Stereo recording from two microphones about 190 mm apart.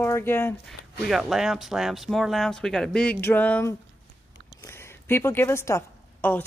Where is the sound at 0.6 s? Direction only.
Centre (ahead or behind).